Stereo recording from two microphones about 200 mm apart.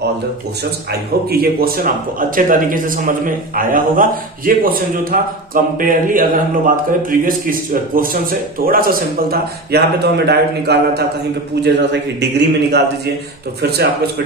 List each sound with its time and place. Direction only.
1.3 s a man's voice: 50° right (ahead or behind)